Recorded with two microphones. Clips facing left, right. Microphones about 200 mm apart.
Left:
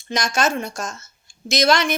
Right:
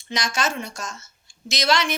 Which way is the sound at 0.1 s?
45° left (ahead or behind).